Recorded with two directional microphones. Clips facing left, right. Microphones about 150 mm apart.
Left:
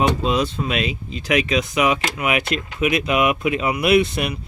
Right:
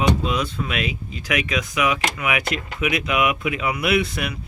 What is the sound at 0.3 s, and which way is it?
Speech, 30° left (ahead or behind).